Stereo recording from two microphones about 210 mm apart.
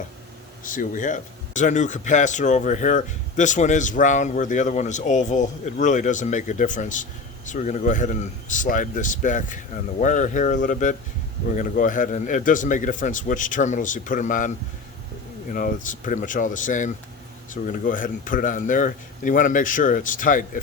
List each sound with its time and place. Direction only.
0.6 s speech: 40° left (ahead or behind)